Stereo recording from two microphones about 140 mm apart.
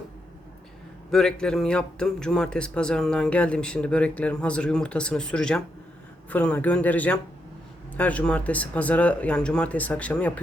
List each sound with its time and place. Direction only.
1.1 s a man's voice: 5° left (ahead or behind)